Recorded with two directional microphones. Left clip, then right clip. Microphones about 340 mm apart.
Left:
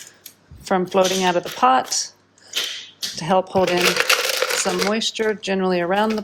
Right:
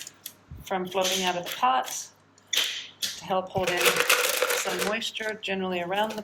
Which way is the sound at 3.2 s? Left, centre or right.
Left.